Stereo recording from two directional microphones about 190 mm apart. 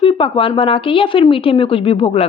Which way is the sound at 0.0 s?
25° left (ahead or behind).